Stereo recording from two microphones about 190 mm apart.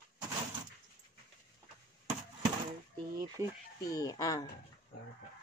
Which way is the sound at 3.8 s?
20° left (ahead or behind).